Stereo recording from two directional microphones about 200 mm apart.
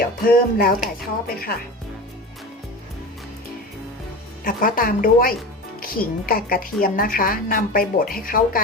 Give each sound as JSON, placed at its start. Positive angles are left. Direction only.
{"t": 0.0, "sound": "speech", "side_deg": 50}
{"t": 4.4, "sound": "speech", "side_deg": 45}